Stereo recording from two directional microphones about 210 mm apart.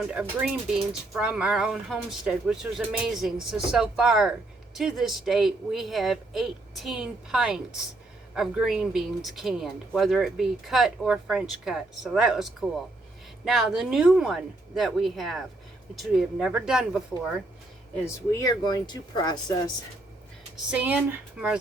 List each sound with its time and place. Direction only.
0.1 s speech: 5° right (ahead or behind)
17.9 s speech: 15° left (ahead or behind)
20.7 s speech: 5° right (ahead or behind)